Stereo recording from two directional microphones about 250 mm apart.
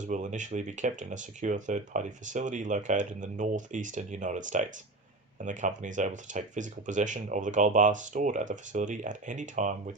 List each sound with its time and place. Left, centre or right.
0.0 s speech: right